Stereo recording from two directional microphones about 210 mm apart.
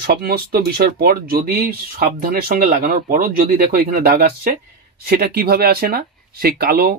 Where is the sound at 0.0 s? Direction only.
45° right (ahead or behind).